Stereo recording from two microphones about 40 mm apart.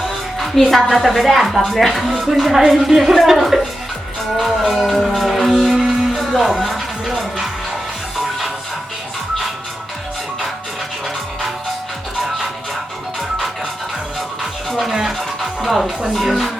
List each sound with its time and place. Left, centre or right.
0.3 s music: centre
0.7 s speech: centre
4.4 s music: centre
14.7 s music: centre
15.6 s speech: centre